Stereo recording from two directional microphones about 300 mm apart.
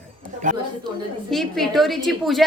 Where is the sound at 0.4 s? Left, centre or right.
Right.